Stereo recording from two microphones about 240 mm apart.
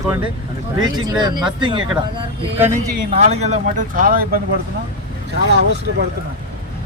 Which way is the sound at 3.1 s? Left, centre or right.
Right.